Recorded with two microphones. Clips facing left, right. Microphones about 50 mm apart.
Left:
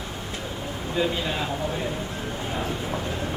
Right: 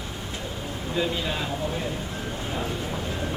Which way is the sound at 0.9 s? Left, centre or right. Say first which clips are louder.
Left 2 dB; centre.